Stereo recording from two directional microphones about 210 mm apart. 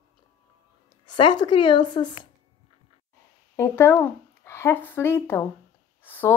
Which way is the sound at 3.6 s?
10° left (ahead or behind).